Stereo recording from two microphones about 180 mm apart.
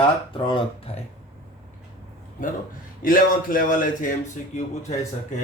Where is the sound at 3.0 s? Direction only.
50° left (ahead or behind).